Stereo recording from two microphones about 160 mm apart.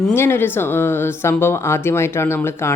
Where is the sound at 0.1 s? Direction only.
15° left (ahead or behind).